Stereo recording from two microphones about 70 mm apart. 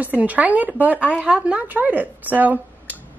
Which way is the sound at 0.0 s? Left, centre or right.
Right.